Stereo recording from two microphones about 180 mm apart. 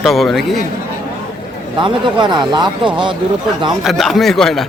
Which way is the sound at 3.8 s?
Centre (ahead or behind).